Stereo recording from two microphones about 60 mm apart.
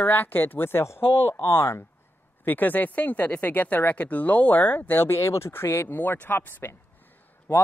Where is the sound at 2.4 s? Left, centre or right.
Left.